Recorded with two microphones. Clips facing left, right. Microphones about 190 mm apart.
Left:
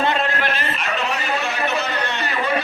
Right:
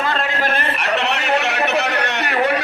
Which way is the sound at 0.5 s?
65° right (ahead or behind).